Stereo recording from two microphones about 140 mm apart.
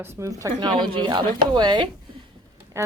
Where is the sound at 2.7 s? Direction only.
20° right (ahead or behind).